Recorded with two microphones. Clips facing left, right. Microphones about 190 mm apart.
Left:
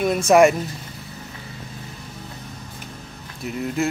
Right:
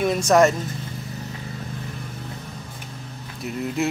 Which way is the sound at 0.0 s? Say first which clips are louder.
Left 2 dB; 5° left (ahead or behind).